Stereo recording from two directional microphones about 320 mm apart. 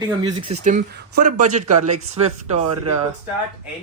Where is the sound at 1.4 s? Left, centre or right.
Right.